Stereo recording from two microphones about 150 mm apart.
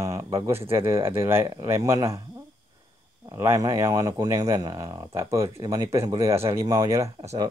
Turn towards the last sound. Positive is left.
turn(degrees=-20)  # may be behind; listen again after turning